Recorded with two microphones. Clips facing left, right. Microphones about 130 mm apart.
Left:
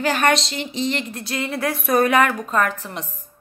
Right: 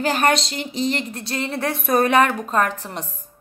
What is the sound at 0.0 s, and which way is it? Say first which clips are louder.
A woman's voice: even; 40° right (ahead or behind).